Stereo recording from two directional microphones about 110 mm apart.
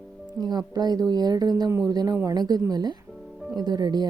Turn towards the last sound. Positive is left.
turn(degrees=-40)  # may be behind; listen again after turning